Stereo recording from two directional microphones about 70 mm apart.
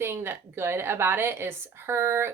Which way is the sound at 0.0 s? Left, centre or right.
Right.